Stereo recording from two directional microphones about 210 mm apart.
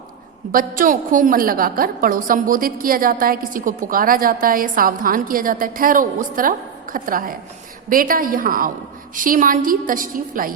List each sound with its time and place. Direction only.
0.8 s a woman's voice: 40° right (ahead or behind)